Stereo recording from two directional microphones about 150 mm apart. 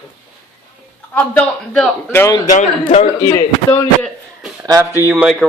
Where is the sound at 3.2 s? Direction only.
20° left (ahead or behind).